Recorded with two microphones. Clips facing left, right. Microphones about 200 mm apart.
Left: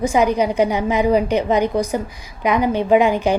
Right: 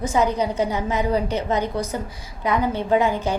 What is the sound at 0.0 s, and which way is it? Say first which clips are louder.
A woman's voice: left 4 dB; 15° left (ahead or behind).